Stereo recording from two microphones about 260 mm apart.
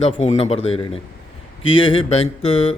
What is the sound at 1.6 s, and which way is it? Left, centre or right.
Speech, left.